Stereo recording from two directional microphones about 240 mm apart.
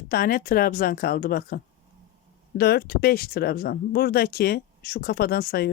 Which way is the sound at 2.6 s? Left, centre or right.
Left.